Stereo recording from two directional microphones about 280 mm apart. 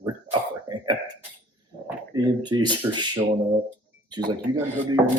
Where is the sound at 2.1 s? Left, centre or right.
Centre.